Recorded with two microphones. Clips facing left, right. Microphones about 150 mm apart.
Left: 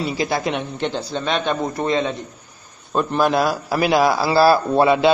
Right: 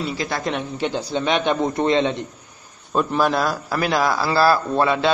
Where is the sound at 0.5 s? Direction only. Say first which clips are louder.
Left 1 dB; 5° right (ahead or behind); by 2.1 s 25° right (ahead or behind).